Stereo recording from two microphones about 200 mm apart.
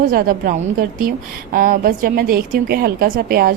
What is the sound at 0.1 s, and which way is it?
A woman's voice, 45° right (ahead or behind).